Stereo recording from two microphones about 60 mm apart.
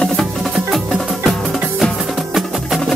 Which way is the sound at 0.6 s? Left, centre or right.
Centre.